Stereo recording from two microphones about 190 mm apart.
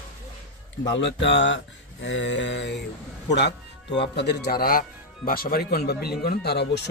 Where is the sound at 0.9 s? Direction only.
70° left (ahead or behind).